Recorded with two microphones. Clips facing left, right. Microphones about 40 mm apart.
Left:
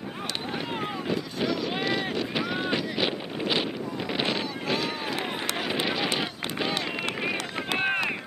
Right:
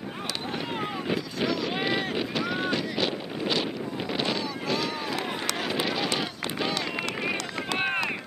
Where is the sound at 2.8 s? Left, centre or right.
Centre.